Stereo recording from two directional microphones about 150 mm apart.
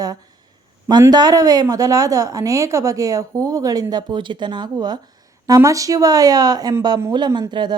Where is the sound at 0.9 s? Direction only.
25° right (ahead or behind).